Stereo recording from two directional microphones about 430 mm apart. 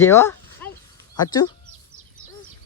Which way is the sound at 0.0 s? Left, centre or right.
Centre.